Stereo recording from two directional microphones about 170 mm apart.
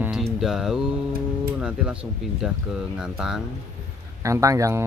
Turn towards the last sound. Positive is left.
turn(degrees=-15)  # may be behind; listen again after turning